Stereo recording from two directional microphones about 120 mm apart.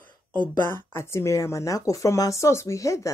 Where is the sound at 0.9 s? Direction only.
20° left (ahead or behind).